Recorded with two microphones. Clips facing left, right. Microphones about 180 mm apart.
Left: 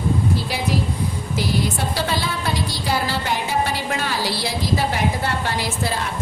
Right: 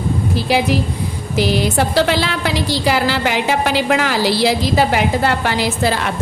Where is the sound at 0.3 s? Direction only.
90° right.